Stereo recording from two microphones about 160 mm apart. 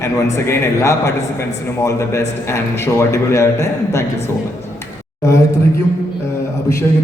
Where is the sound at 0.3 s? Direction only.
15° left (ahead or behind).